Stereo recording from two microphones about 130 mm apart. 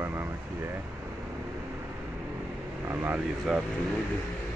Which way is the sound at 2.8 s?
15° right (ahead or behind).